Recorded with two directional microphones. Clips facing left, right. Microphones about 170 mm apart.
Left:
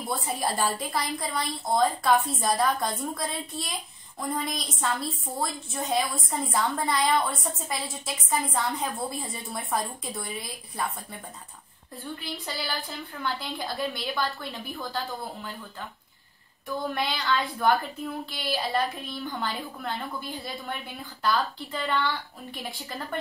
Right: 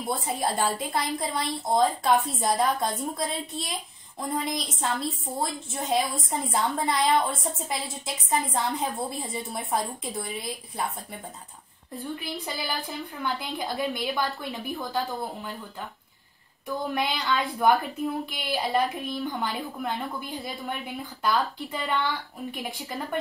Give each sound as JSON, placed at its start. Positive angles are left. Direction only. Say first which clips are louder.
{"t": 0.1, "sound": "a woman's voice", "louder": "right 1 dB", "side_deg": -25}
{"t": 11.9, "sound": "a woman's voice", "louder": "right 3 dB", "side_deg": -20}
{"t": 16.7, "sound": "a woman's voice", "louder": "right 1 dB", "side_deg": -15}